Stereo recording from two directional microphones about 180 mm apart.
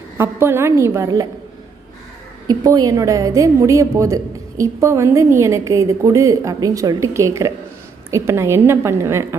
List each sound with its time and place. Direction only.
0.2 s a woman's voice: 15° right (ahead or behind)
2.5 s a woman's voice: 20° right (ahead or behind)